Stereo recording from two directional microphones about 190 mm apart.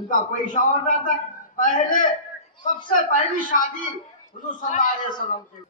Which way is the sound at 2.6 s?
25° left (ahead or behind).